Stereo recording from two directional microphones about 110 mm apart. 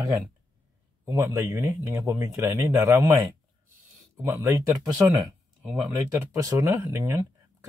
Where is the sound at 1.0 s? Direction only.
25° right (ahead or behind).